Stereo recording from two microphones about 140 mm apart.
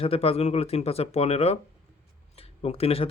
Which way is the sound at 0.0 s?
45° left (ahead or behind).